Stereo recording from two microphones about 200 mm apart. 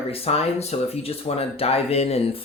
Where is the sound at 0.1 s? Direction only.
30° left (ahead or behind).